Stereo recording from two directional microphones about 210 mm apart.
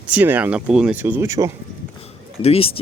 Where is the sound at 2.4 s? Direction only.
30° left (ahead or behind).